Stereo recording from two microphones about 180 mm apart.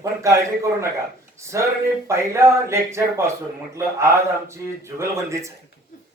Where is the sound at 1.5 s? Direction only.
15° right (ahead or behind).